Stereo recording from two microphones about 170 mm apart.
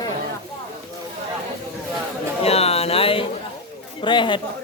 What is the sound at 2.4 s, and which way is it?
A man's voice, 35° left (ahead or behind).